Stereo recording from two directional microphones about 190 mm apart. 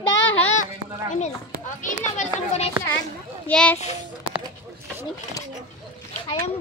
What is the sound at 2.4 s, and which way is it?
Speech, 35° left (ahead or behind).